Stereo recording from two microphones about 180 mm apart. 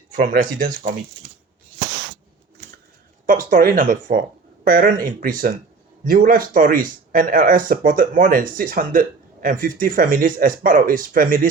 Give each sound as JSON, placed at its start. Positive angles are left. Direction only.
{"t": 0.2, "sound": "speech", "side_deg": -45}
{"t": 3.2, "sound": "speech", "side_deg": -50}